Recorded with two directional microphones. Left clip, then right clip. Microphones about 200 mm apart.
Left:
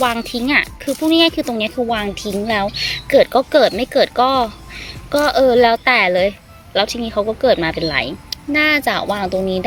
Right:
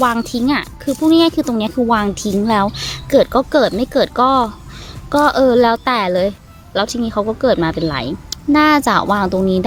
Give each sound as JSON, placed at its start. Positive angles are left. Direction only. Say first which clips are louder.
{"t": 0.0, "sound": "speech", "louder": "right 2 dB", "side_deg": -10}
{"t": 8.5, "sound": "speech", "louder": "right 3 dB", "side_deg": -20}